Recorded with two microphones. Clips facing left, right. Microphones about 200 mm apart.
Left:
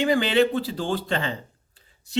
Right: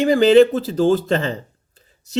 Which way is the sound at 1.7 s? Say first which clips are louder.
Right 4 dB; 40° right (ahead or behind).